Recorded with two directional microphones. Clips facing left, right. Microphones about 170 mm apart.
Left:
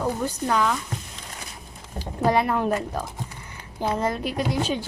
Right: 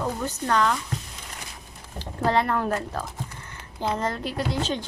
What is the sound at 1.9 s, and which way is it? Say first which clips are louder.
Speech: left 2 dB; 10° left (ahead or behind).